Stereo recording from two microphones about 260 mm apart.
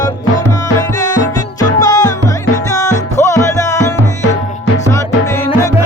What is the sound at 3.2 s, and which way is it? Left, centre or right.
Music, centre.